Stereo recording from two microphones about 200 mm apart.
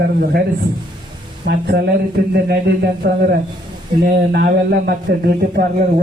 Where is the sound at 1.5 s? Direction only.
55° right (ahead or behind).